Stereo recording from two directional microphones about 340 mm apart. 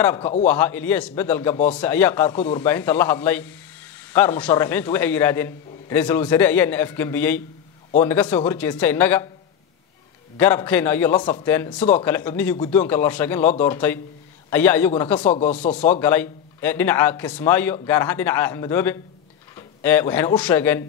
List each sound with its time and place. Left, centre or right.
0.0 s a man's voice: centre
10.3 s a man's voice: centre